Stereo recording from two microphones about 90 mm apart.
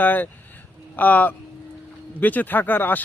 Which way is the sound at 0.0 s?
20° left (ahead or behind).